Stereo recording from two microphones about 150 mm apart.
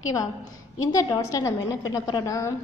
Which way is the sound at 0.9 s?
25° left (ahead or behind).